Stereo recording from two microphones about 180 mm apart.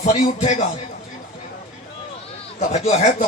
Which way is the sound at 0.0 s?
40° left (ahead or behind).